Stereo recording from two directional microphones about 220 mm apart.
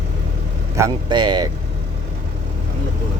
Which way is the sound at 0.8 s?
15° right (ahead or behind).